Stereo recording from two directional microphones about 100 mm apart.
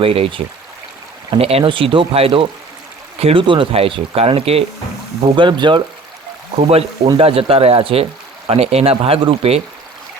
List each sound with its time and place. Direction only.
0.0 s speech: 70° right (ahead or behind)
1.3 s speech: 80° right
3.2 s speech: 85° right
3.4 s speech: 55° right (ahead or behind); by 4.6 s 75° right (ahead or behind)
5.4 s speech: 50° right (ahead or behind)
6.7 s speech: 90° right
7.2 s speech: 70° right (ahead or behind)
8.4 s speech: 85° right